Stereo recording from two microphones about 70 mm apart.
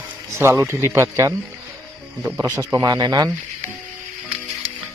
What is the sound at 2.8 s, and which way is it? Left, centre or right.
Speech, right.